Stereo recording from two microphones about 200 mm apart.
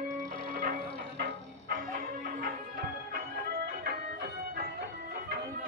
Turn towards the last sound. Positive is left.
turn(degrees=-50)  # may be behind; listen again after turning